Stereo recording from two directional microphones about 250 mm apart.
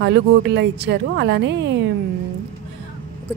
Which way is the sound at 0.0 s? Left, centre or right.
Right.